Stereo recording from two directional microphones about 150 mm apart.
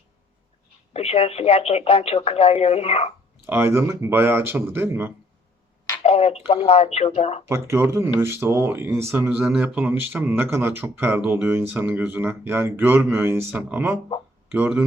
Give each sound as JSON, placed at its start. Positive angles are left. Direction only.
{"t": 0.9, "sound": "speech", "side_deg": 40}
{"t": 3.4, "sound": "speech", "side_deg": -15}
{"t": 6.0, "sound": "speech", "side_deg": 40}
{"t": 7.4, "sound": "speech", "side_deg": -15}